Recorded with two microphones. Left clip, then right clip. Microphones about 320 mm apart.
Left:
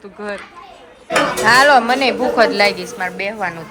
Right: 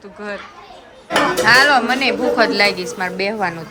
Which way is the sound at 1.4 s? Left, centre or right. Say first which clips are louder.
Left 2 dB; centre.